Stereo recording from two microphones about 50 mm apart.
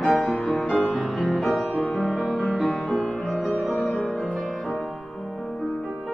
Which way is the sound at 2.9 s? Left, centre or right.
Centre.